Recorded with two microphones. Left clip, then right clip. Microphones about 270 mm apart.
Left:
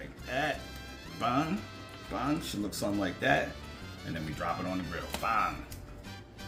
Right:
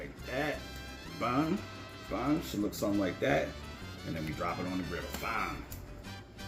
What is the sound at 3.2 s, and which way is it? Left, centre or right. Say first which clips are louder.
Speech: left 4 dB; left.